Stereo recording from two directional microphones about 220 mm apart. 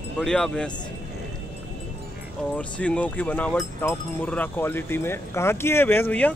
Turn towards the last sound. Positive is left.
turn(degrees=5)  # may be behind; listen again after turning